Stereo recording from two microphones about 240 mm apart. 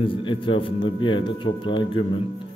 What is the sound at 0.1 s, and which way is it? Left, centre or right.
Speech, left.